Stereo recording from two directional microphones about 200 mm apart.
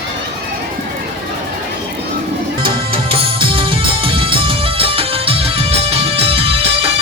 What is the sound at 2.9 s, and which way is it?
Music, 25° right (ahead or behind).